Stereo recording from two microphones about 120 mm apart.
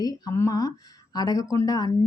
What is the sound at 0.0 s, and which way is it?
Speech, 30° left (ahead or behind).